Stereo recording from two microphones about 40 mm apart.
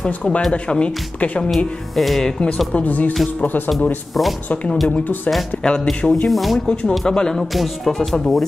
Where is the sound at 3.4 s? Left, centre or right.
Left.